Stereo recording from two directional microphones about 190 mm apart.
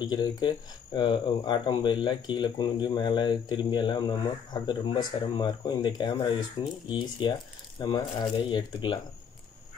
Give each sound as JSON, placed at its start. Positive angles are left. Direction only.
{"t": 0.0, "sound": "speech", "side_deg": 20}